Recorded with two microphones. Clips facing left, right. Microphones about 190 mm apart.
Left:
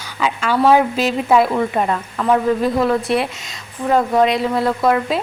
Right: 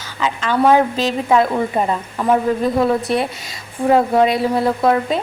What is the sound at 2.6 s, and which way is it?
A woman's voice, centre (ahead or behind).